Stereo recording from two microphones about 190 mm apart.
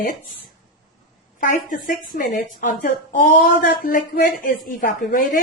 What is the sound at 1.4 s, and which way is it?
A woman's voice, 45° left (ahead or behind).